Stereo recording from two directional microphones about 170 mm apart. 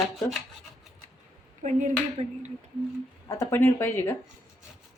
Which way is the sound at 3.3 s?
15° left (ahead or behind).